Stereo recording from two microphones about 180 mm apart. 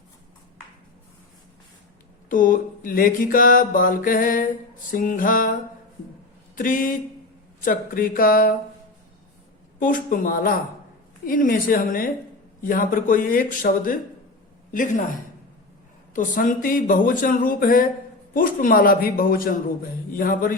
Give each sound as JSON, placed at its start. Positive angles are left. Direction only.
{"t": 2.3, "sound": "mantra", "side_deg": 50}
{"t": 6.6, "sound": "mantra", "side_deg": 50}
{"t": 9.8, "sound": "mantra", "side_deg": 50}
{"t": 16.1, "sound": "mantra", "side_deg": 45}